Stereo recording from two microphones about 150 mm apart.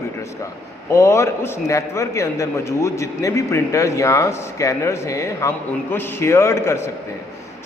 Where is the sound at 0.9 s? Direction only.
20° left (ahead or behind).